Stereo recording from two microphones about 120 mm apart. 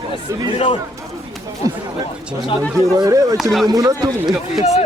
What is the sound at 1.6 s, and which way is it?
Speech, 30° right (ahead or behind).